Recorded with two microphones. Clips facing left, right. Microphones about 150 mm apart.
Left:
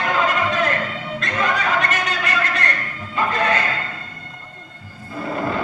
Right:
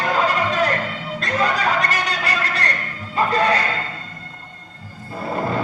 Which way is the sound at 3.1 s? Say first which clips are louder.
Right 2 dB; 35° right (ahead or behind).